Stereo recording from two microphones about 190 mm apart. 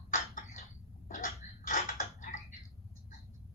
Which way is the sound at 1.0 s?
45° left (ahead or behind).